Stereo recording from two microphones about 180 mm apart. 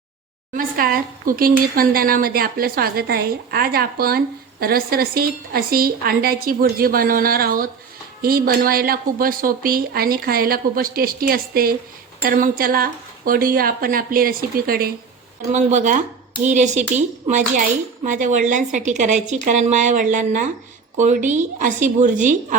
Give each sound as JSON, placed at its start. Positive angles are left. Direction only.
{"t": 0.5, "sound": "a woman's voice", "side_deg": -55}
{"t": 15.5, "sound": "a woman's voice", "side_deg": -45}